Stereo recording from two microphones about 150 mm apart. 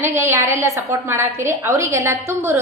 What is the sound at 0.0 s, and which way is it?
A woman's voice, 15° right (ahead or behind).